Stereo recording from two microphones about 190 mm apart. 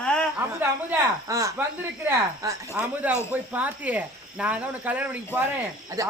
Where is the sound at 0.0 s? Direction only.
5° left (ahead or behind).